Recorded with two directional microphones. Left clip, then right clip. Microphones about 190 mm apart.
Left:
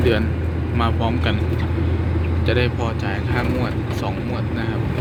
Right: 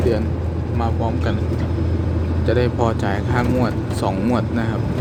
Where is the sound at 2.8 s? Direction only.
20° right (ahead or behind).